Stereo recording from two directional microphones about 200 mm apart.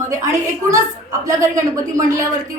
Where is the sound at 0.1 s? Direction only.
15° right (ahead or behind).